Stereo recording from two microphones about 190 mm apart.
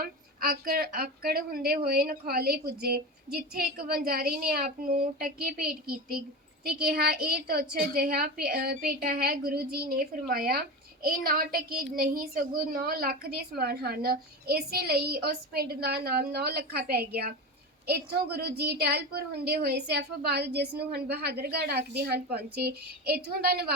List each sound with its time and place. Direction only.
0.0 s a woman's voice: 50° right (ahead or behind)